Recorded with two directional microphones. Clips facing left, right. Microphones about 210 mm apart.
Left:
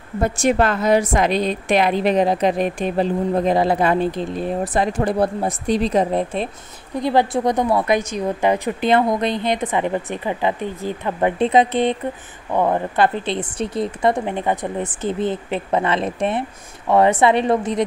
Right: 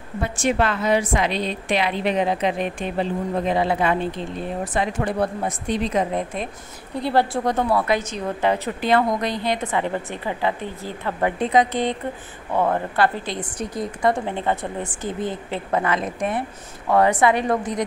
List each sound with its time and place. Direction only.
0.2 s a woman's voice: 45° left (ahead or behind)
7.0 s a woman's voice: 15° left (ahead or behind)